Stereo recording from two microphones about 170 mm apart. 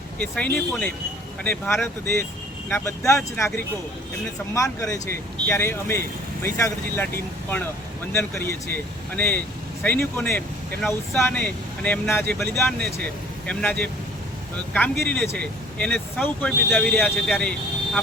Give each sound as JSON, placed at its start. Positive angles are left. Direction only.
{"t": 0.2, "sound": "speech", "side_deg": 5}
{"t": 8.1, "sound": "speech", "side_deg": 15}